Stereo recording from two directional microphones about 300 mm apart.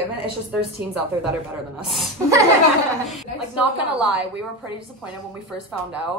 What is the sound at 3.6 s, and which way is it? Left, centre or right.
Speech, centre.